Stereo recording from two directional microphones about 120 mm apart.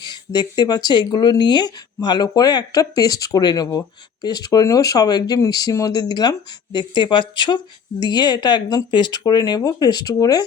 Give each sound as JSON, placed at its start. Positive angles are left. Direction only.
{"t": 0.0, "sound": "speech", "side_deg": 35}